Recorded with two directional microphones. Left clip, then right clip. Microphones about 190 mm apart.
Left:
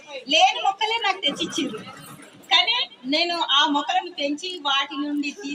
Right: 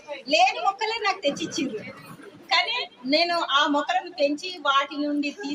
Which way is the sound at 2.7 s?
35° right (ahead or behind).